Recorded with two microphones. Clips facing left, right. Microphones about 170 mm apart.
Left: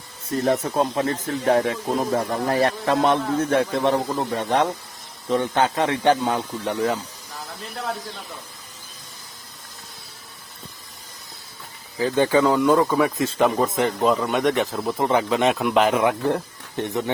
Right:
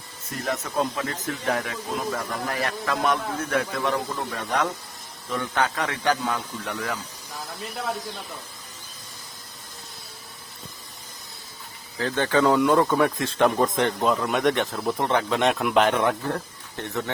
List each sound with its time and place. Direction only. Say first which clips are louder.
0.4 s speech: left 5 dB; 30° left (ahead or behind)
11.9 s speech: left 4 dB; 10° left (ahead or behind)
16.3 s speech: left 5 dB; 15° left (ahead or behind)